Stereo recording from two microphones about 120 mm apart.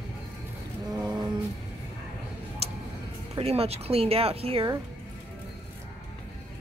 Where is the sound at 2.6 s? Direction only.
55° right (ahead or behind).